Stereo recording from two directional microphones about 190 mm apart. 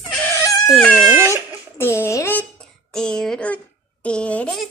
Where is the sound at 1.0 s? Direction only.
15° right (ahead or behind).